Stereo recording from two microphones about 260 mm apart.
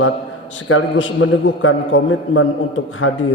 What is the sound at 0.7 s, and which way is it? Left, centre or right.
A man's voice, left.